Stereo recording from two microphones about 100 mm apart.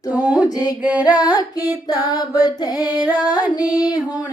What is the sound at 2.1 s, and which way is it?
Female singing, 40° left (ahead or behind).